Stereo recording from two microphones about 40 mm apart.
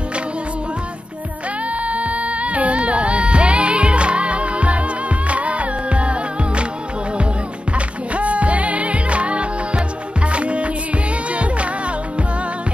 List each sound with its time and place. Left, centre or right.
1.9 s music: right
7.7 s music: right